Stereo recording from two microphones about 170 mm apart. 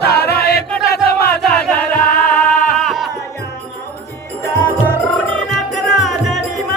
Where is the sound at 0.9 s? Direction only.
65° left (ahead or behind).